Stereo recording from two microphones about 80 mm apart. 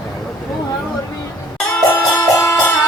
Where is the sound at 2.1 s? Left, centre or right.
Left.